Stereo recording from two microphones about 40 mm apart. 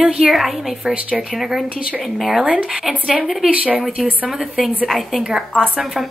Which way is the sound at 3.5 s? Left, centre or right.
Right.